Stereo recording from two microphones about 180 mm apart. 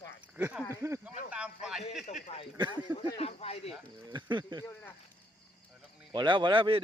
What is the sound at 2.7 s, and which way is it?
Speech, 30° left (ahead or behind).